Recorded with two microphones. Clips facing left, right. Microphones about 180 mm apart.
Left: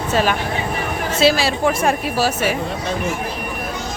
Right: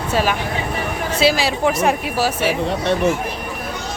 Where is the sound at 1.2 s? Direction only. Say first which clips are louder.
Left 1 dB; 15° right (ahead or behind).